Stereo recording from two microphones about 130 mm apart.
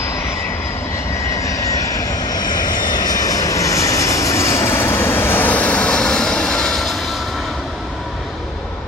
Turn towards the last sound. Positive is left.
turn(degrees=0)  # may be behind; listen again after turning